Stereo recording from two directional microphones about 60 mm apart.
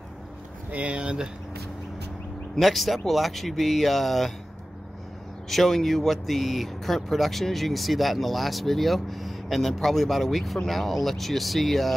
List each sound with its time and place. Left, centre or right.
0.7 s a sound: right
2.6 s speech: centre
5.5 s speech: centre